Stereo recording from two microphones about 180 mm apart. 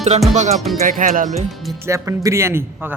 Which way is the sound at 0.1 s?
40° right (ahead or behind).